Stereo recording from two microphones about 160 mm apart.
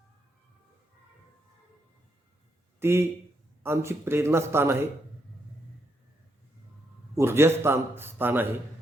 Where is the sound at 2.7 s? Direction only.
15° right (ahead or behind).